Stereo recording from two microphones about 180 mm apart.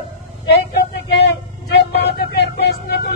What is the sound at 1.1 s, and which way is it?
Vehicle, 70° left (ahead or behind).